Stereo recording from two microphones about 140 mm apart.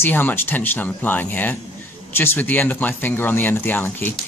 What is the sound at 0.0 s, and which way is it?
Speech, 15° left (ahead or behind).